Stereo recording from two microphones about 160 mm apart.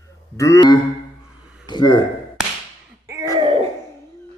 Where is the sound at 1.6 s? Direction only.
25° left (ahead or behind).